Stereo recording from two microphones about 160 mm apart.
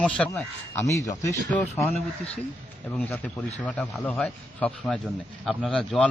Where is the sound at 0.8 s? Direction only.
20° left (ahead or behind).